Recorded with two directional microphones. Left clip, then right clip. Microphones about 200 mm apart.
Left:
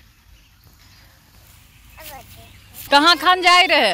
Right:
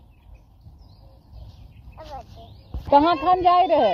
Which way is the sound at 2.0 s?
60° left (ahead or behind).